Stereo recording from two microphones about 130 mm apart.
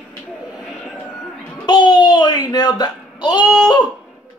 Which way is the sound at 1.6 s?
35° left (ahead or behind).